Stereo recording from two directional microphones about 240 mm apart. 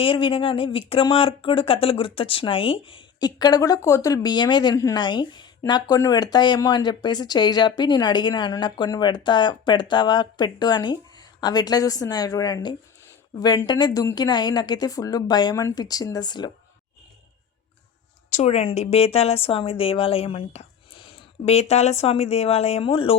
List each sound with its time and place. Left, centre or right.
0.0 s speech: left
18.3 s a woman's voice: left